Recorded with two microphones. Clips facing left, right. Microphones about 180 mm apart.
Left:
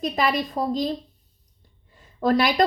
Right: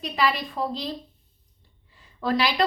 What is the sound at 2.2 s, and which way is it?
Speech, 45° left (ahead or behind).